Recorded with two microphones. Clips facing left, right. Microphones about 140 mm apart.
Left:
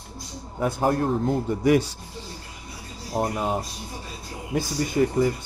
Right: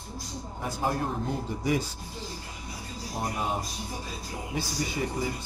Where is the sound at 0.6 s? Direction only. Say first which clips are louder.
Left 7 dB; 60° left (ahead or behind).